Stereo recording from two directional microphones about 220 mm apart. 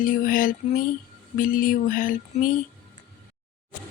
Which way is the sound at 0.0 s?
40° left (ahead or behind).